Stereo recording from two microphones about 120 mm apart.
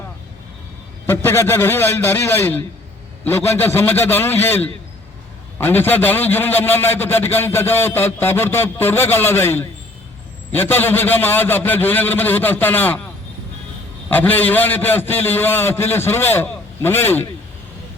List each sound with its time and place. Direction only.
1.0 s a man's voice: 20° left (ahead or behind)
14.1 s a man's voice: 15° left (ahead or behind)